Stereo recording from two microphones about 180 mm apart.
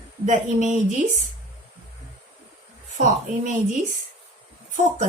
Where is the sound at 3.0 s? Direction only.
45° right (ahead or behind).